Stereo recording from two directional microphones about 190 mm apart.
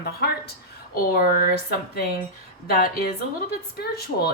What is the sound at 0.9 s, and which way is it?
Speech, 50° left (ahead or behind).